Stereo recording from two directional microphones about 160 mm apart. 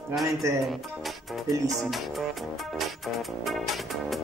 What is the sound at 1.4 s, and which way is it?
Speech, 20° right (ahead or behind).